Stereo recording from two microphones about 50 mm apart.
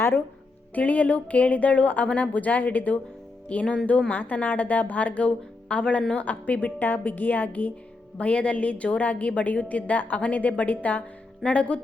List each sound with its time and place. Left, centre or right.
0.7 s a woman's voice: left